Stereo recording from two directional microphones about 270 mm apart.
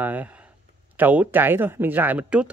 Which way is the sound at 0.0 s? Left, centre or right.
Centre.